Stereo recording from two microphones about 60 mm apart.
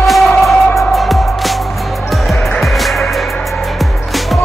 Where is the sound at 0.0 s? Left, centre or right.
Centre.